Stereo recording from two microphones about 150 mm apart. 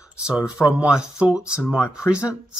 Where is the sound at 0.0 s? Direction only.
5° right (ahead or behind).